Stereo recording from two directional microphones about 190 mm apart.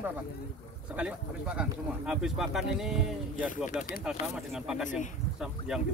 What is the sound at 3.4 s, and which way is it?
Speech, 45° left (ahead or behind).